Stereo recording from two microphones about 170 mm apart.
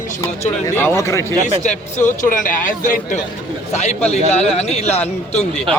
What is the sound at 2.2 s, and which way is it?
A man's voice, 50° left (ahead or behind).